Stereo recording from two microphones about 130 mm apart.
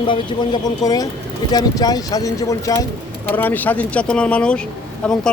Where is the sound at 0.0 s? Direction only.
40° left (ahead or behind).